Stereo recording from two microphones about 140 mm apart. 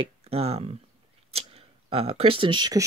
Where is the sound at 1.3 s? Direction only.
45° right (ahead or behind).